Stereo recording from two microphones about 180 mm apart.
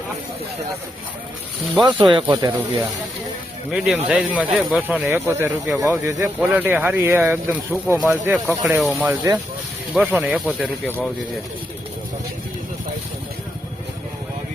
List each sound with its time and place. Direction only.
1.8 s speech: 25° right (ahead or behind)
3.7 s speech: centre (ahead or behind)
8.8 s speech: centre (ahead or behind)
9.0 s speech: 20° right (ahead or behind)